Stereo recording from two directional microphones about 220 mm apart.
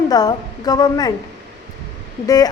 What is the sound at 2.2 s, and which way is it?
Speech, 15° left (ahead or behind).